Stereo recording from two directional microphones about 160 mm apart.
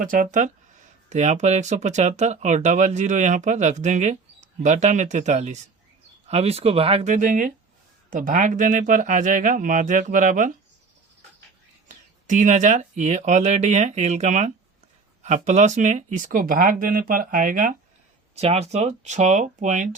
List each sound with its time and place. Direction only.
0.0 s speech: 55° right (ahead or behind)
12.3 s speech: 50° right (ahead or behind)
18.3 s speech: 40° right (ahead or behind)